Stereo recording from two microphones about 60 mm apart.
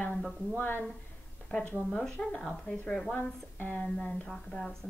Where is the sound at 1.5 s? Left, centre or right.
Left.